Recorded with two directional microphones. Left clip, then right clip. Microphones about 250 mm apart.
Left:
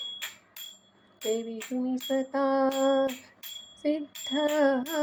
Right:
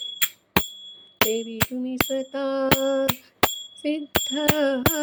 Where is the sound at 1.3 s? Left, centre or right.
Right.